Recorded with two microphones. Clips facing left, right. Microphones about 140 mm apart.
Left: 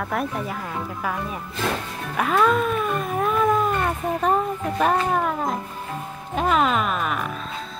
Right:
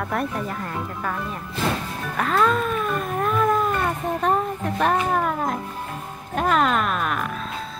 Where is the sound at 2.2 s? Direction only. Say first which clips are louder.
Left 1 dB; 5° left (ahead or behind).